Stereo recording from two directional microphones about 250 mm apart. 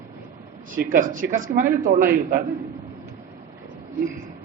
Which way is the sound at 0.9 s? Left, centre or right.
Right.